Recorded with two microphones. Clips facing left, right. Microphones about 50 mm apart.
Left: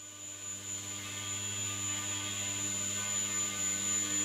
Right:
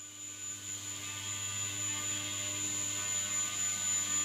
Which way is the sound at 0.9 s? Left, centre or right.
Centre.